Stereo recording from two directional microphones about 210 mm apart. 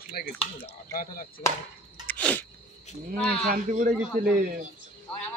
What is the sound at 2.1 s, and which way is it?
Sneeze, 5° left (ahead or behind).